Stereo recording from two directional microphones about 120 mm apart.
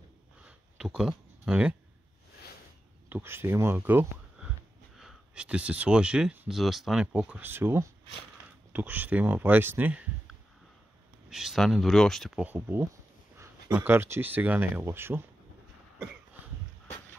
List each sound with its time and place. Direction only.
0.5 s a sound: 5° right (ahead or behind)
3.1 s speech: 20° right (ahead or behind)
4.4 s speech: 5° right (ahead or behind)
12.4 s speech: 15° right (ahead or behind)